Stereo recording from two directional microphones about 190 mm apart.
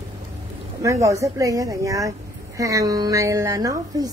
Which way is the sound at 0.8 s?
15° right (ahead or behind).